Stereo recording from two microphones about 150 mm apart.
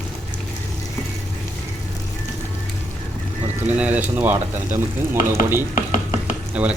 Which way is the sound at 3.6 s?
10° right (ahead or behind).